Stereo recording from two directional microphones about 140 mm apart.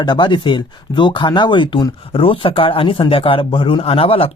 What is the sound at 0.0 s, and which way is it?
Speech, 35° left (ahead or behind).